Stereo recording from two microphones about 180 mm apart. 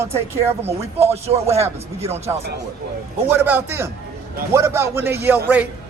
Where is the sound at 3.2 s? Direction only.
10° right (ahead or behind).